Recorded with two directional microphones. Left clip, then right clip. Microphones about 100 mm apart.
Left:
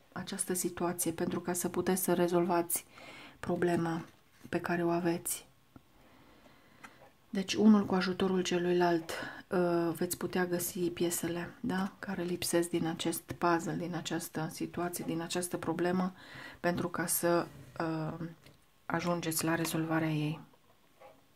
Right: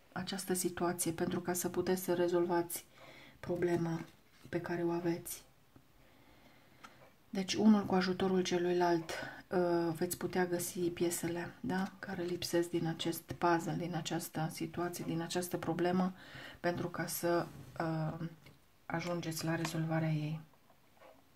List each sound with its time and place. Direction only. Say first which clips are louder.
0.2 s a sound: right 1 dB; 15° left (ahead or behind)
0.5 s speech: left 1 dB; 20° left (ahead or behind); by 3.9 s 90° left
4.5 s speech: left 4 dB; 75° left (ahead or behind)
7.3 s speech: left 3 dB; 25° left (ahead or behind)
12.0 s speech: left 2 dB; 45° left (ahead or behind)
13.3 s speech: left 1 dB; 30° left (ahead or behind)
16.6 s speech: left 4 dB; 40° left (ahead or behind); by 18.3 s 20° left (ahead or behind)
18.9 s speech: left 5 dB; 55° left (ahead or behind)